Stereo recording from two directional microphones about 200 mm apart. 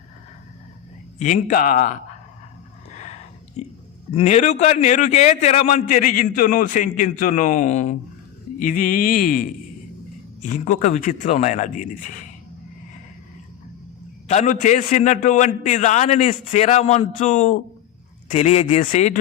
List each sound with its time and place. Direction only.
1.2 s speech: 40° left (ahead or behind)
2.9 s a sound: 35° left (ahead or behind)
4.1 s a man's voice: 30° left (ahead or behind)
14.3 s a man's voice: 35° left (ahead or behind)